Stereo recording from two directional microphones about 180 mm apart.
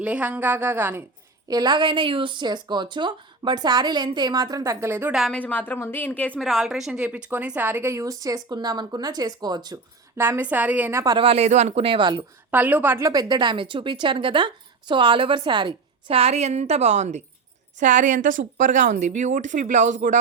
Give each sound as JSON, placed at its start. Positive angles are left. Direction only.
{"t": 0.0, "sound": "a woman's voice", "side_deg": -5}
{"t": 1.5, "sound": "a woman's voice", "side_deg": -25}
{"t": 11.0, "sound": "speech", "side_deg": -25}
{"t": 12.5, "sound": "speech", "side_deg": -10}